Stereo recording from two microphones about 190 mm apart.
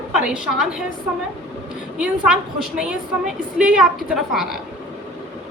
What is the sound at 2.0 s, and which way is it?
A woman's voice, 5° right (ahead or behind).